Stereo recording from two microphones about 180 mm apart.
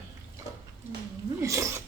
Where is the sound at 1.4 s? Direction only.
15° right (ahead or behind).